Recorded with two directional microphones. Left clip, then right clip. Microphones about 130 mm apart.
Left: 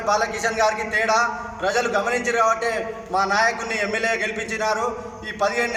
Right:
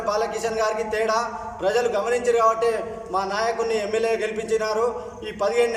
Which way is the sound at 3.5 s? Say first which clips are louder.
Right 3 dB; 35° right (ahead or behind).